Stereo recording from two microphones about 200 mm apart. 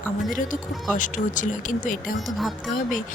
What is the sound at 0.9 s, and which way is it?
Speech, 40° left (ahead or behind).